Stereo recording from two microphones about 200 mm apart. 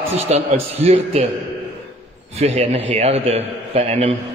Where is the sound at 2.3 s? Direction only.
30° right (ahead or behind).